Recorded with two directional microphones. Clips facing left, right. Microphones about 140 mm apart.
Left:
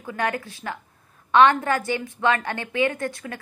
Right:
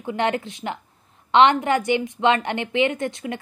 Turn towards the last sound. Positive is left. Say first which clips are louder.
# right 3 dB
turn(degrees=-20)  # may be behind; listen again after turning